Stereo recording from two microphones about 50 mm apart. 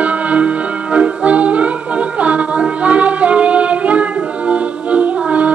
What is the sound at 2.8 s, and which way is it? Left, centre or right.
Music, right.